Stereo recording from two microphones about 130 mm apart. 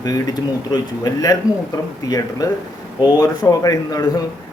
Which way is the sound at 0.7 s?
30° left (ahead or behind).